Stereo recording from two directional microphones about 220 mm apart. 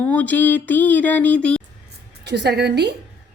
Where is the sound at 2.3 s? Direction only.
50° right (ahead or behind).